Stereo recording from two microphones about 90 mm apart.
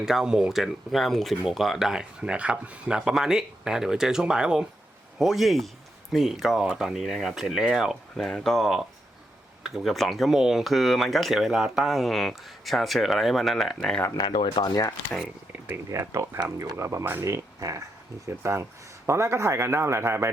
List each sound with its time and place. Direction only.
0.0 s speech: 5° right (ahead or behind)
14.2 s speech: 55° left (ahead or behind)
15.5 s a sound: 20° right (ahead or behind)
15.9 s a man's voice: 35° right (ahead or behind)
16.4 s speech: 50° right (ahead or behind)
16.7 s a man's voice: 35° right (ahead or behind)